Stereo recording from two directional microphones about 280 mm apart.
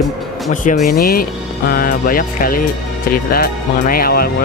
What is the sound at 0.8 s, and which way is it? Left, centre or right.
Speech, left.